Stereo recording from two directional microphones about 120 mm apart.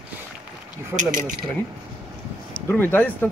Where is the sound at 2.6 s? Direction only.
15° left (ahead or behind).